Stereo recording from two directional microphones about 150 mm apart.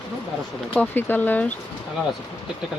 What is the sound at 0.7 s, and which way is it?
Speech, 10° left (ahead or behind).